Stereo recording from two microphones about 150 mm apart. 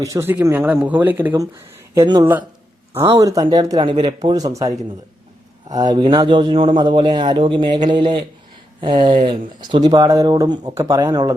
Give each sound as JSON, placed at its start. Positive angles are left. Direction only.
{"t": 0.0, "sound": "speech", "side_deg": -20}
{"t": 2.0, "sound": "speech", "side_deg": -25}